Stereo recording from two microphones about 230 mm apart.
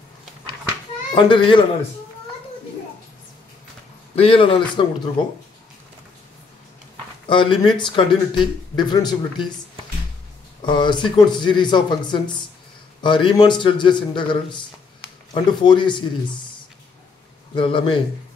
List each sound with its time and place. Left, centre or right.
1.1 s speech: left
4.1 s speech: left
7.2 s speech: left
10.6 s speech: centre
17.6 s speech: left